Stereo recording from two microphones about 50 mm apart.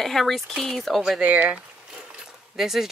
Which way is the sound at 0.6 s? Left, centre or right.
Centre.